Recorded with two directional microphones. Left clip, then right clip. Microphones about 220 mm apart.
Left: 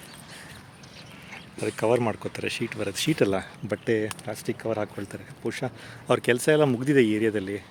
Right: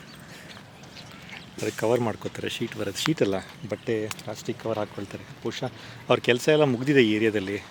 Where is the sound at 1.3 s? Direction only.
5° left (ahead or behind).